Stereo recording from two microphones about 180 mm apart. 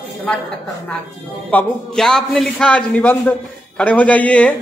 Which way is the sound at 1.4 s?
5° left (ahead or behind).